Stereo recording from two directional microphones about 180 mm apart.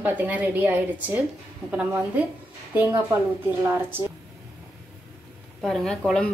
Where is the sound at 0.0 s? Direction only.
10° right (ahead or behind).